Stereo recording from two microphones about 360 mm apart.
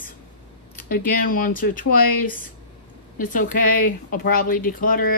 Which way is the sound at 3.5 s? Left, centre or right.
Left.